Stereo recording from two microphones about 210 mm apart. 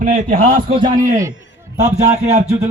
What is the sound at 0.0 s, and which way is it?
A man's voice, 40° right (ahead or behind).